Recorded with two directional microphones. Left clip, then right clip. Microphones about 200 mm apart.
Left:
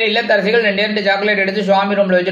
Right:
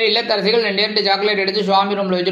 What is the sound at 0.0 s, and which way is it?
A man's voice, 30° right (ahead or behind).